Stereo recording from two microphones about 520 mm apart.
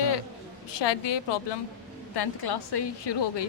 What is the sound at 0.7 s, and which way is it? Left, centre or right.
A woman's voice, left.